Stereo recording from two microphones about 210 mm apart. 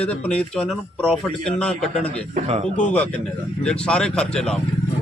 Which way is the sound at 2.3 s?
30° right (ahead or behind).